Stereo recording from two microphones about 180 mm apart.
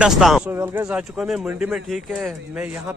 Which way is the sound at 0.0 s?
Centre (ahead or behind).